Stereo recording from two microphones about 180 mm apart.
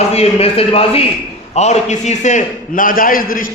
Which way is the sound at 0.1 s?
35° left (ahead or behind).